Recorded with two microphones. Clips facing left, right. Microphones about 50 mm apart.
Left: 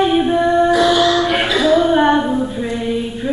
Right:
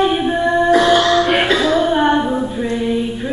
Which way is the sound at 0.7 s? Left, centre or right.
Right.